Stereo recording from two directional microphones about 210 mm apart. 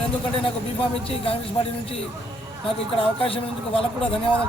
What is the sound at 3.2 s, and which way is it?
Speech, 25° left (ahead or behind).